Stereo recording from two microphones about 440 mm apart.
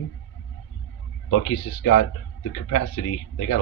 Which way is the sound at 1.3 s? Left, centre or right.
Left.